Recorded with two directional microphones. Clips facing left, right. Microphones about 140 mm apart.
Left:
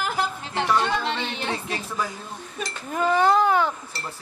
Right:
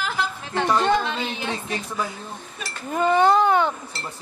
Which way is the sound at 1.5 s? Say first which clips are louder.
Right 1 dB; 20° right (ahead or behind).